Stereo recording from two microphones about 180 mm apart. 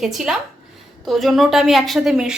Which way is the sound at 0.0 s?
Centre (ahead or behind).